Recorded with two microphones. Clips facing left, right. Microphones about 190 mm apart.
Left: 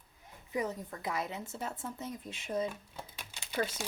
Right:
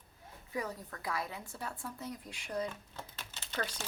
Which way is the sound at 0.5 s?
20° left (ahead or behind).